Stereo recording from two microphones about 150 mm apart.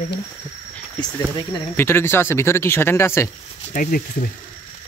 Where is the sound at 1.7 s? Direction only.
15° left (ahead or behind).